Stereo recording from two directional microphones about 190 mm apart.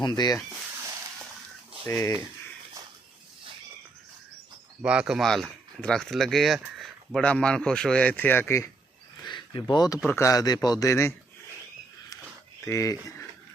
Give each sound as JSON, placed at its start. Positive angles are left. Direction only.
{"t": 0.0, "sound": "speech", "side_deg": 20}
{"t": 1.8, "sound": "a man's voice", "side_deg": 15}
{"t": 4.8, "sound": "speech", "side_deg": -5}
{"t": 9.2, "sound": "a sound", "side_deg": 25}
{"t": 10.1, "sound": "a man's voice", "side_deg": 15}
{"t": 12.6, "sound": "speech", "side_deg": 15}